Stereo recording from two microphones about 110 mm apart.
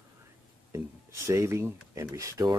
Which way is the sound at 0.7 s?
25° right (ahead or behind).